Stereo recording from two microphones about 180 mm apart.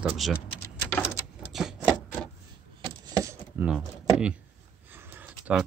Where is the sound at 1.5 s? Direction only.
Centre (ahead or behind).